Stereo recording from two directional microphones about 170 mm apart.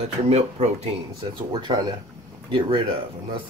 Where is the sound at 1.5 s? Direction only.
25° right (ahead or behind).